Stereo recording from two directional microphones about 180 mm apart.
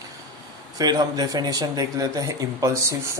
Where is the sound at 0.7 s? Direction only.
20° right (ahead or behind).